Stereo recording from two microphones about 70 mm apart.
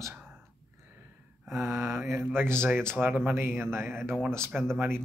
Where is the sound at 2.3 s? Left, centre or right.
Right.